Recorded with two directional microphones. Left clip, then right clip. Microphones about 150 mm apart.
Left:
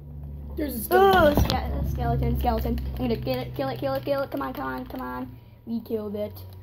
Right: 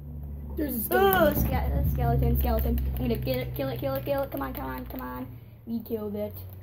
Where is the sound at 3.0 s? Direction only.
65° left (ahead or behind); by 6.2 s 85° left.